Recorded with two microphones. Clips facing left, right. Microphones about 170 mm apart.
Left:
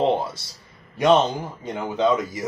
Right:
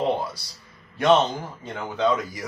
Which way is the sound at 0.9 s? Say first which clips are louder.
Left 1 dB; 15° left (ahead or behind).